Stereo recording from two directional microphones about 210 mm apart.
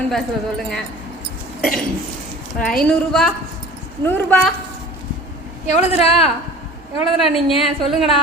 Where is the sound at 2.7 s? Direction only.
5° left (ahead or behind).